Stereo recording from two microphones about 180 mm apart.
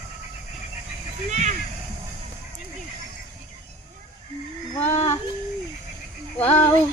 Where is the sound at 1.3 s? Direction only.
40° right (ahead or behind).